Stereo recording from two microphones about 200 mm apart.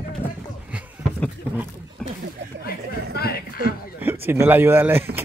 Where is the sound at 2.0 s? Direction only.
5° left (ahead or behind).